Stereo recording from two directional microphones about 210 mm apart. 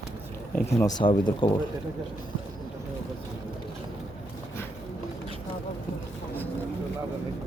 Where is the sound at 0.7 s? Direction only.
20° left (ahead or behind).